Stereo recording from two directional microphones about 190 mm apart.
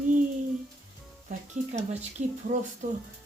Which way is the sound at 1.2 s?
40° right (ahead or behind).